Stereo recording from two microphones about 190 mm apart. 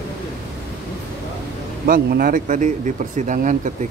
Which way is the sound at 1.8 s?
50° right (ahead or behind).